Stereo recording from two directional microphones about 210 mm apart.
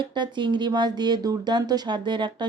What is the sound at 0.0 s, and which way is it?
Speech, 20° right (ahead or behind).